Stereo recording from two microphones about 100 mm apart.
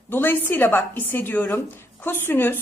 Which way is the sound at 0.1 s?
20° left (ahead or behind).